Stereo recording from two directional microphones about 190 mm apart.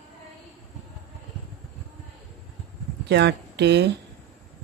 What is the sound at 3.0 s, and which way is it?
Speech, 65° right (ahead or behind).